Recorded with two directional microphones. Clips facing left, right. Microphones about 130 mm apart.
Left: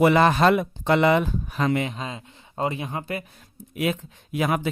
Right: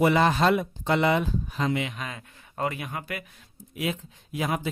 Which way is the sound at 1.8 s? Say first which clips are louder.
Left 4 dB; 30° left (ahead or behind).